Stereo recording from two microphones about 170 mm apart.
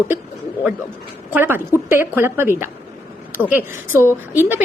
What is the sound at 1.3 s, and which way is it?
A woman's voice, 10° right (ahead or behind).